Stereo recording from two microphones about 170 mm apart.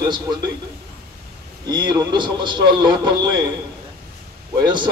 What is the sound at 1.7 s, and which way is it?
A man's voice, 25° right (ahead or behind).